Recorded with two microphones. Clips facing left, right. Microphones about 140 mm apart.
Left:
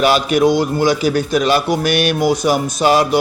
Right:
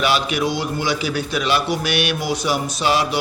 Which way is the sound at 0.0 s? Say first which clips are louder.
Left 7 dB; 45° left (ahead or behind).